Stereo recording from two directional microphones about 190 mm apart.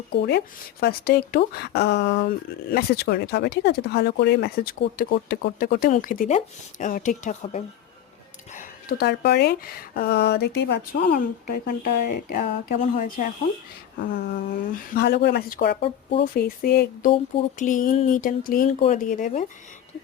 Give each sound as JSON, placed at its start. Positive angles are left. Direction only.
{"t": 0.1, "sound": "speech", "side_deg": 60}
{"t": 8.5, "sound": "speech", "side_deg": 55}
{"t": 11.2, "sound": "speech", "side_deg": 45}